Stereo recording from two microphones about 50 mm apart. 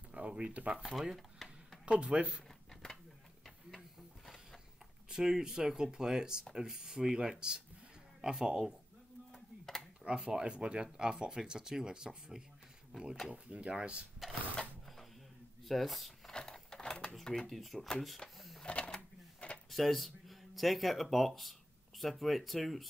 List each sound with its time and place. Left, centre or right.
0.1 s speech: right
0.8 s a sound: centre
1.9 s speech: right
2.7 s a sound: centre
5.1 s speech: centre
9.3 s a sound: centre
10.0 s speech: centre
13.3 s speech: right
14.6 s sewing machine: centre
15.6 s speech: centre
16.3 s a sound: centre
17.1 s speech: centre
18.6 s sewing machine: centre
19.7 s speech: centre